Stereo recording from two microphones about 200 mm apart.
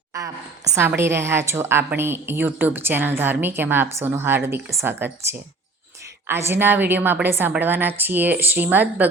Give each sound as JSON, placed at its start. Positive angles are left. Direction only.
{"t": 0.1, "sound": "a woman's voice", "side_deg": -15}
{"t": 6.5, "sound": "a woman's voice", "side_deg": -10}